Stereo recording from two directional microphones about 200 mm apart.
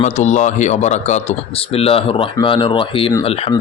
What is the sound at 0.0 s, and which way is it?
Speech, 35° left (ahead or behind).